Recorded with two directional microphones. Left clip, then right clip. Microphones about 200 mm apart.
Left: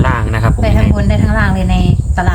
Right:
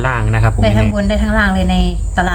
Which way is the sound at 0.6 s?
10° right (ahead or behind).